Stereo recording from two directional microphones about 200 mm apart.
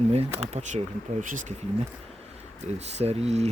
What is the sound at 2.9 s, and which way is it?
Speech, 30° right (ahead or behind).